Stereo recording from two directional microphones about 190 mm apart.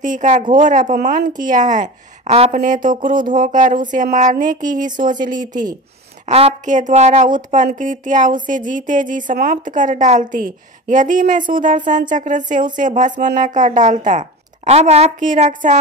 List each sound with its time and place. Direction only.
0.0 s speech: 40° right (ahead or behind)